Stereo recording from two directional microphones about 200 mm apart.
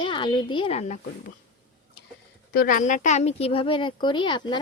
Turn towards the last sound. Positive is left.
turn(degrees=20)  # may be behind; listen again after turning